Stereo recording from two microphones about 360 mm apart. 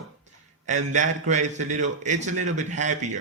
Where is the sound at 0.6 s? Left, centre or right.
Centre.